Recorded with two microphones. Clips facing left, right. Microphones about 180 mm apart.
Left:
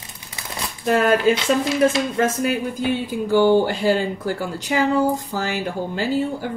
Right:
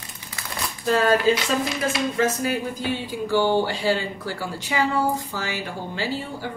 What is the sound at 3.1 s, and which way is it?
A woman's voice, 50° left (ahead or behind).